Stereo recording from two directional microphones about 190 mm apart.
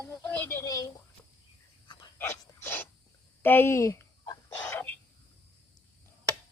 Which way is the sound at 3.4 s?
10° left (ahead or behind).